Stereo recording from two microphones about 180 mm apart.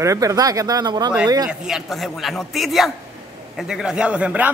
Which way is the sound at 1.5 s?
Centre (ahead or behind).